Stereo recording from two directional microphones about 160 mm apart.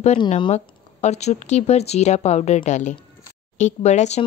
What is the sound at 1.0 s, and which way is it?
Speech, 45° left (ahead or behind).